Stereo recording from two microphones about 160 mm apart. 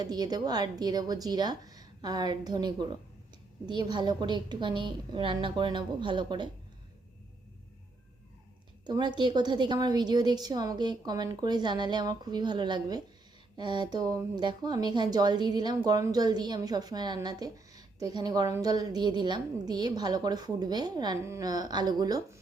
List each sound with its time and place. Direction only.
0.0 s a woman's voice: 25° right (ahead or behind)
8.9 s a woman's voice: 25° right (ahead or behind)